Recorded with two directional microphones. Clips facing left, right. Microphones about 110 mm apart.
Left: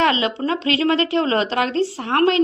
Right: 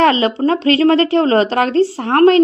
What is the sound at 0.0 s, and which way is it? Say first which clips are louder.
A woman's voice: right 6 dB; 45° right (ahead or behind).